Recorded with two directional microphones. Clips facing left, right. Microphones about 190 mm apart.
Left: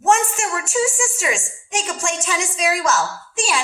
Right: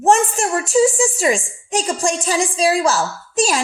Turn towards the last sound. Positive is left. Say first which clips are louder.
# right 5 dB
turn(degrees=-40)  # may be behind; listen again after turning